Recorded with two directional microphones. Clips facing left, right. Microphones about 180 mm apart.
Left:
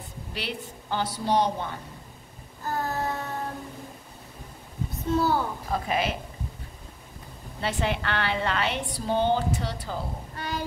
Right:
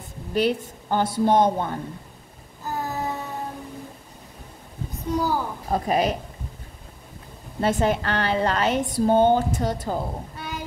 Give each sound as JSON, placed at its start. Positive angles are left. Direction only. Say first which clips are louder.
{"t": 0.3, "sound": "a woman's voice", "louder": "right 13 dB", "side_deg": -45}
{"t": 2.6, "sound": "child singing", "louder": "right 1 dB", "side_deg": -15}
{"t": 5.1, "sound": "a sound", "louder": "even", "side_deg": -15}
{"t": 5.7, "sound": "a woman's voice", "louder": "right 7 dB", "side_deg": -40}
{"t": 7.6, "sound": "a woman's voice", "louder": "right 6 dB", "side_deg": -45}
{"t": 10.3, "sound": "a sound", "louder": "left 1 dB", "side_deg": -10}